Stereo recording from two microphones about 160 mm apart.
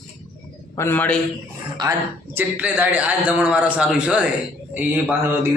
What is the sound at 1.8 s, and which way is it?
Speech, 25° right (ahead or behind).